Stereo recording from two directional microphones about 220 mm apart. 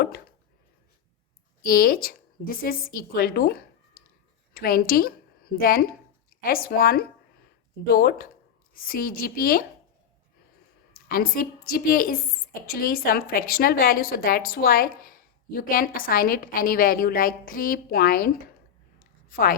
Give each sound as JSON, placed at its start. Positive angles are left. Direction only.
{"t": 1.6, "sound": "a woman's voice", "side_deg": 40}
{"t": 10.9, "sound": "a woman's voice", "side_deg": 40}
{"t": 19.3, "sound": "speech", "side_deg": 40}